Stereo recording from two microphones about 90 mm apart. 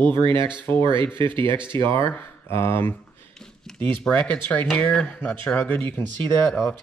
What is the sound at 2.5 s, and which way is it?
Speech, 25° left (ahead or behind).